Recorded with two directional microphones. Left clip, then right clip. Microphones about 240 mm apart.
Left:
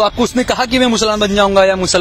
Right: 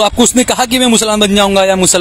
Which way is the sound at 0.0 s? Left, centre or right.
Right.